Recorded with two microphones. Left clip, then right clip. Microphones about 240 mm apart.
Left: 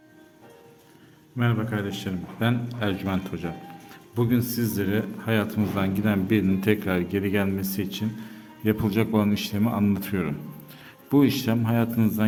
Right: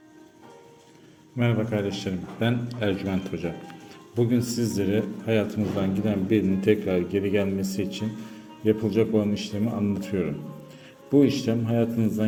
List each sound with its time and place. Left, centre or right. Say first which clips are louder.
1.4 s a man's voice: right 2 dB; centre